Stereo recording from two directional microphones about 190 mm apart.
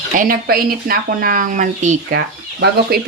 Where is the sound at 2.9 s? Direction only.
55° right (ahead or behind).